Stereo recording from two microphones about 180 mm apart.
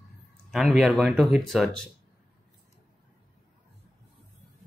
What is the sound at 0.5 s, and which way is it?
Speech, centre (ahead or behind).